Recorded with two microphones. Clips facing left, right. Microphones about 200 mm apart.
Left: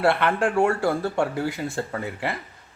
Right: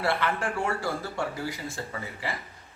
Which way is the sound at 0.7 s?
55° left (ahead or behind).